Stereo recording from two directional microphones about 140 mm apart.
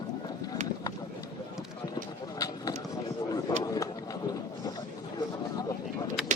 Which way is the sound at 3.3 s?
25° left (ahead or behind).